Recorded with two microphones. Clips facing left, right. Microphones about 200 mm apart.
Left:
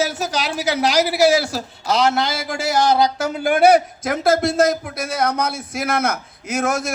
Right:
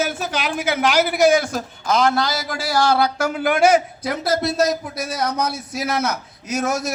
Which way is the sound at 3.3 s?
30° left (ahead or behind).